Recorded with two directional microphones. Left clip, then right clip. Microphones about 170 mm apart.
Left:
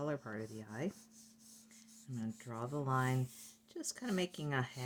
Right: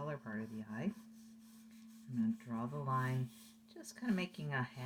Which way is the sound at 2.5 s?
50° left (ahead or behind).